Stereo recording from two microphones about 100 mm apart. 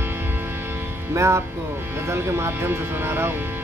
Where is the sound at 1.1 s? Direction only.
30° right (ahead or behind).